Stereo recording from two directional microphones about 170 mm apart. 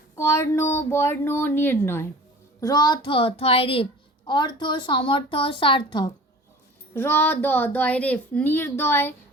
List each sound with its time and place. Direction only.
0.2 s a woman's voice: 15° left (ahead or behind)
6.9 s a woman's voice: 15° left (ahead or behind)